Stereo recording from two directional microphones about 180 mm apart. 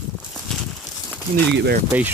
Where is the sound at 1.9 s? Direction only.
10° right (ahead or behind).